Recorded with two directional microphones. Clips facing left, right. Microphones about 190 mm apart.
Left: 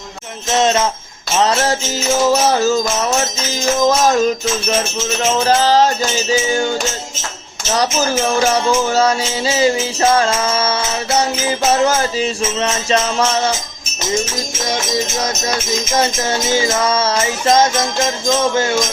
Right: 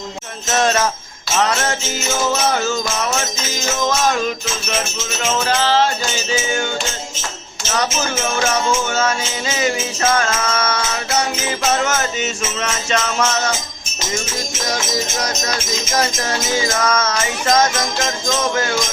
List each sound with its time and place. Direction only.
0.5 s music: 20° left (ahead or behind)
1.4 s music: 30° left (ahead or behind)
7.7 s music: 35° left (ahead or behind)
16.0 s music: 25° left (ahead or behind)